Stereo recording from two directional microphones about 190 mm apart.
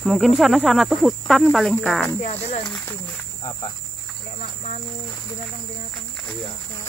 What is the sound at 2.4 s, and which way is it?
Speech, 30° left (ahead or behind).